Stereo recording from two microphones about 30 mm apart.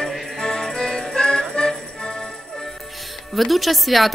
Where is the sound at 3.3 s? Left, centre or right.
Centre.